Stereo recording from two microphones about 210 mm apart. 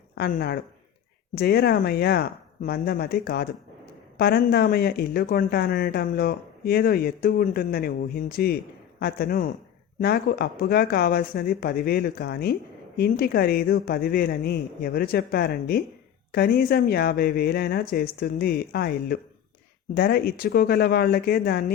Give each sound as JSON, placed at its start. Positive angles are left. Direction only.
{"t": 0.2, "sound": "speech", "side_deg": 45}